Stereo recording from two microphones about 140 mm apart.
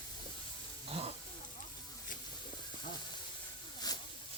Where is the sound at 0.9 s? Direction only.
45° right (ahead or behind).